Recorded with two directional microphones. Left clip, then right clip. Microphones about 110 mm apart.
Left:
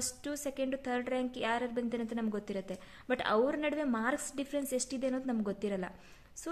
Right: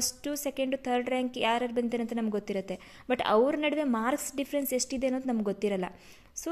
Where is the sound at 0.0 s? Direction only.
30° right (ahead or behind).